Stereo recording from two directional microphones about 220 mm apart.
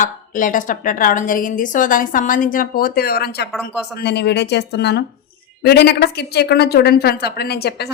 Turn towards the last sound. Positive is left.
turn(degrees=45)  # may be behind; listen again after turning